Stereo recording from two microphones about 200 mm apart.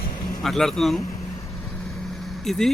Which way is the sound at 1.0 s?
15° left (ahead or behind).